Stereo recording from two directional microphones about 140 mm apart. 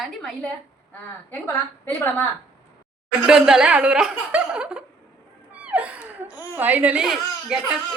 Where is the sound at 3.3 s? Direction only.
5° right (ahead or behind).